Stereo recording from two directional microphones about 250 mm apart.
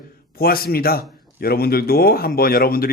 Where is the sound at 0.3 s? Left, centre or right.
Left.